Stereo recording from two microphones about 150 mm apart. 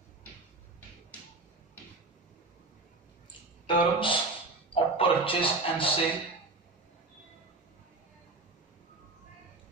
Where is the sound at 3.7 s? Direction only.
35° left (ahead or behind).